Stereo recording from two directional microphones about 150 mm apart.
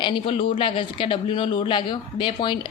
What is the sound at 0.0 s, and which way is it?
A woman's voice, 35° left (ahead or behind).